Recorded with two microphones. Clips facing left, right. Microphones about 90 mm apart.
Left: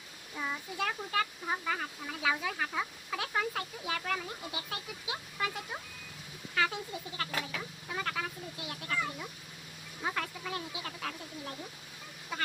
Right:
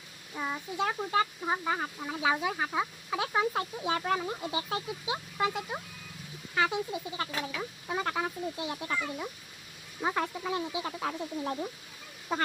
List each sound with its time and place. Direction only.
0.3 s speech: 20° right (ahead or behind)
12.3 s speech: 35° right (ahead or behind)